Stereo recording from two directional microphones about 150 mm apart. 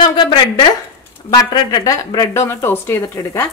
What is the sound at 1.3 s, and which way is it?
Speech, 25° left (ahead or behind).